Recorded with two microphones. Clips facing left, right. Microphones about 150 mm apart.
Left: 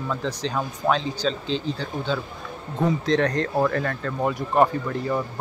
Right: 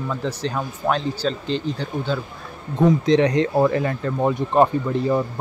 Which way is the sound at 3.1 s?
15° right (ahead or behind).